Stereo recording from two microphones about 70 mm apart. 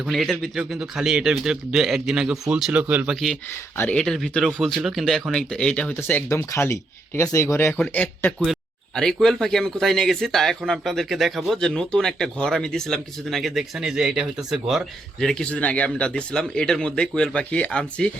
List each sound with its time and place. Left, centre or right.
0.0 s a man's voice: centre
2.7 s speech: right
3.9 s speech: centre
5.9 s speech: left
7.7 s speech: centre
8.2 s speech: left
9.2 s a man's voice: centre
15.2 s speech: centre
15.4 s speech: centre